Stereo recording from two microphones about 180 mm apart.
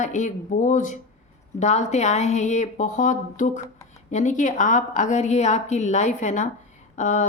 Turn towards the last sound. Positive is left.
turn(degrees=45)  # may be behind; listen again after turning